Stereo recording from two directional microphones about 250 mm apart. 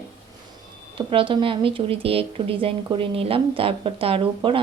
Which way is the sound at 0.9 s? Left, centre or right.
Centre.